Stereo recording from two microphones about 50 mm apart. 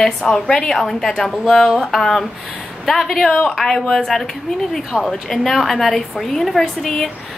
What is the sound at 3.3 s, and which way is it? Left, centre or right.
A woman's voice, centre.